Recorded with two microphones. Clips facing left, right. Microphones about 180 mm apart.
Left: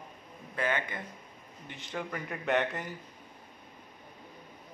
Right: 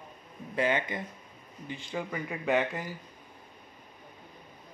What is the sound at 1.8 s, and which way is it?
A man's voice, 5° right (ahead or behind).